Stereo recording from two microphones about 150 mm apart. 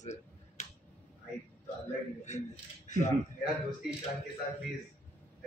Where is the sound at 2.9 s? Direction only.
55° left (ahead or behind).